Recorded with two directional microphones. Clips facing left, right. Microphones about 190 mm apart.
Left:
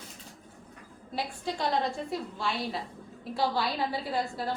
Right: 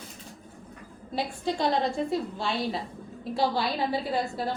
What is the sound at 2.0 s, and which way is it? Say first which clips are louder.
Speech: right 4 dB; 25° right (ahead or behind).